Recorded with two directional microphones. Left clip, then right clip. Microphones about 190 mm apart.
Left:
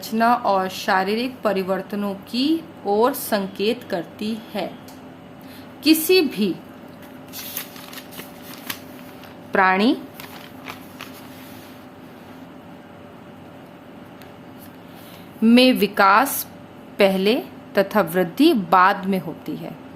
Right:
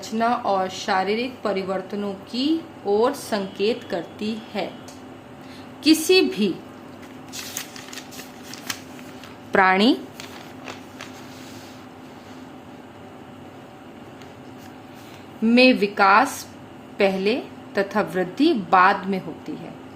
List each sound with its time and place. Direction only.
0.0 s a woman's voice: 30° left (ahead or behind)
5.8 s a woman's voice: 10° left (ahead or behind)
9.5 s a woman's voice: centre (ahead or behind)
15.4 s a woman's voice: 35° left (ahead or behind)